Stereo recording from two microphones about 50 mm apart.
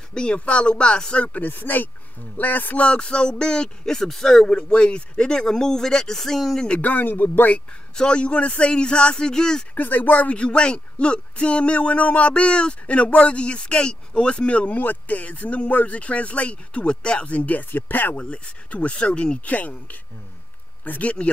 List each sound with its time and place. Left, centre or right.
0.1 s speech: centre
1.4 s speech: left
2.8 s speech: left
4.5 s speech: centre
6.8 s speech: left
7.9 s speech: centre
9.8 s speech: left
18.2 s speech: left